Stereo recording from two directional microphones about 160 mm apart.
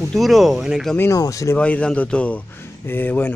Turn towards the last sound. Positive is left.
turn(degrees=10)  # may be behind; listen again after turning